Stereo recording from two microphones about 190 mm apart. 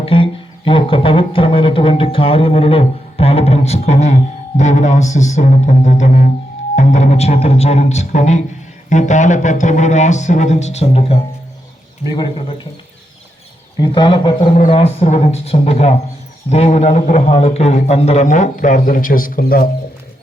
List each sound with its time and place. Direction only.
0.0 s a man's voice: 30° left (ahead or behind)
13.7 s a man's voice: 25° left (ahead or behind); by 19.6 s 50° left (ahead or behind)